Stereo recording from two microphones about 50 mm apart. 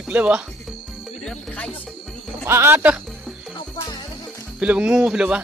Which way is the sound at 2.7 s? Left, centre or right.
Right.